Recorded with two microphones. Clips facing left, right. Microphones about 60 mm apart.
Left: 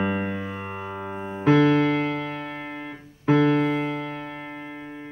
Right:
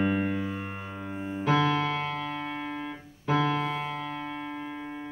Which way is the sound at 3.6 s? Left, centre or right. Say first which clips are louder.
Left 7 dB; left.